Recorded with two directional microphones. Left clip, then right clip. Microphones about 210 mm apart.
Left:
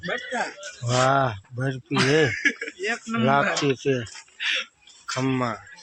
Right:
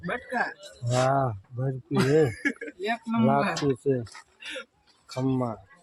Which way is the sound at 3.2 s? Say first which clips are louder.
Left 4 dB; centre (ahead or behind).